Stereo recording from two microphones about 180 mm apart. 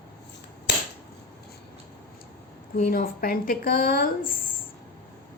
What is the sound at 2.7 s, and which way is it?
A woman's voice, 50° left (ahead or behind).